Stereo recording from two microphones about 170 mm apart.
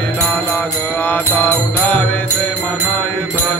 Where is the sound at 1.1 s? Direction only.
10° left (ahead or behind).